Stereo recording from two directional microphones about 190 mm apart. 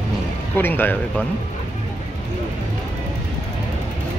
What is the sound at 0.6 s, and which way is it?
Speech, 10° left (ahead or behind).